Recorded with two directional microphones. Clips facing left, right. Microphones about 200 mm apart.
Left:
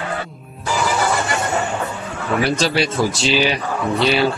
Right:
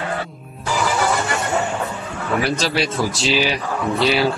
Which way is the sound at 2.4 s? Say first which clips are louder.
Left 5 dB; centre (ahead or behind).